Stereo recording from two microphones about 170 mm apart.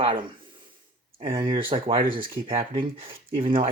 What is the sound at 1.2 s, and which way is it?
Speech, 30° right (ahead or behind).